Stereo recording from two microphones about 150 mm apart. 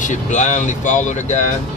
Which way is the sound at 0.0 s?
55° left (ahead or behind).